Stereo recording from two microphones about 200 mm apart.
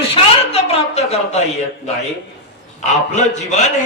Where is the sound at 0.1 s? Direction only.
30° left (ahead or behind).